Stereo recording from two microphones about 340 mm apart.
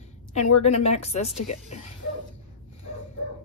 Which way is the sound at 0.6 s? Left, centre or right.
Centre.